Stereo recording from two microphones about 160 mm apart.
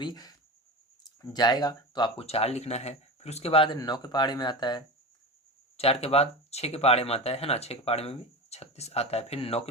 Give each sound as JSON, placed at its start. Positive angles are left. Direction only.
{"t": 0.0, "sound": "speech", "side_deg": 25}
{"t": 5.7, "sound": "speech", "side_deg": 40}